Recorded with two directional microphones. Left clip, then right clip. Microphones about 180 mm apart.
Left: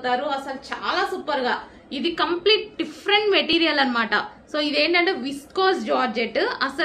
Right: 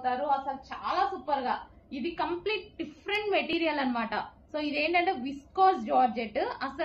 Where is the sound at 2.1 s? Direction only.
40° left (ahead or behind).